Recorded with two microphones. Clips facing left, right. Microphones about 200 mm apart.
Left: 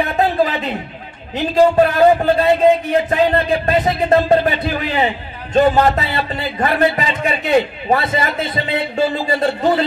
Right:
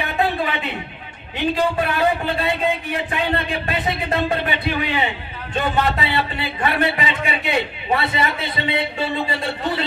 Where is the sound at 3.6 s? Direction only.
40° left (ahead or behind).